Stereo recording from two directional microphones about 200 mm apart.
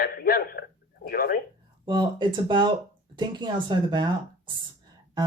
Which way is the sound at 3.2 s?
20° right (ahead or behind).